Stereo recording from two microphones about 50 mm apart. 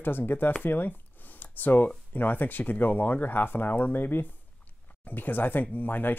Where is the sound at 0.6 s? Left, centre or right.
Left.